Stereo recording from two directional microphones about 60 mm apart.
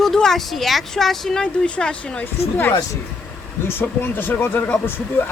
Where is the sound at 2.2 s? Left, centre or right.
Left.